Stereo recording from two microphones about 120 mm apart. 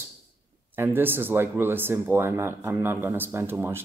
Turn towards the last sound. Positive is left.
turn(degrees=-20)  # may be behind; listen again after turning